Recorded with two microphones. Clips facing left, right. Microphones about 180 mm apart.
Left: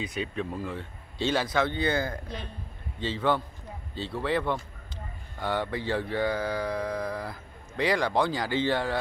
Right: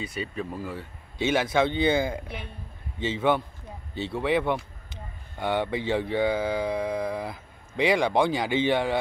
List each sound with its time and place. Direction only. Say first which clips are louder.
0.0 s speech: even; 5° right (ahead or behind)
1.1 s speech: right 3 dB; 15° right (ahead or behind)
3.2 s a man's voice: right 3 dB; 20° right (ahead or behind)